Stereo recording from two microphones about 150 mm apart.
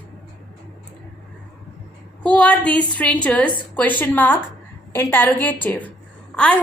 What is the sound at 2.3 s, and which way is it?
A woman's voice, 5° left (ahead or behind).